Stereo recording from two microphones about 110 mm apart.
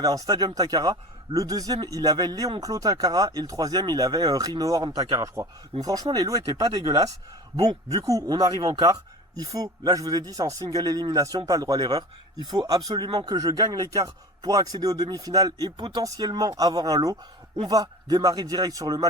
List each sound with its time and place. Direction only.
0.0 s speech: 35° right (ahead or behind)